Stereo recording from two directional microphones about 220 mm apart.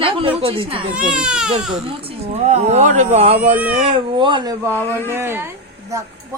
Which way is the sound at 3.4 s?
5° right (ahead or behind).